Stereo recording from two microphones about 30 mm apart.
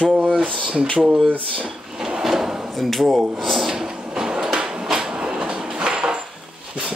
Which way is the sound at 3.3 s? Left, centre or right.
Centre.